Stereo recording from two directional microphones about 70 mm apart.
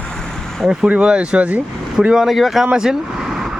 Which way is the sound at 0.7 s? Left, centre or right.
Centre.